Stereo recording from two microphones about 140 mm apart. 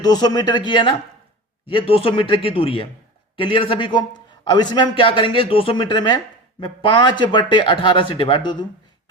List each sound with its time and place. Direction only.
0.0 s speech: 30° left (ahead or behind)